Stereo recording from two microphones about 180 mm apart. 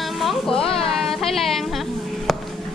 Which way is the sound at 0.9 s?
Centre (ahead or behind).